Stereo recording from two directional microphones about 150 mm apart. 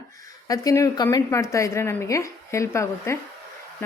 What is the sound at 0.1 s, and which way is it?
A woman's voice, 25° left (ahead or behind).